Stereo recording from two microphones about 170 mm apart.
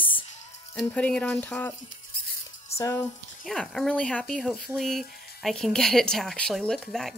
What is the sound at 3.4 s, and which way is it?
Speech, centre (ahead or behind).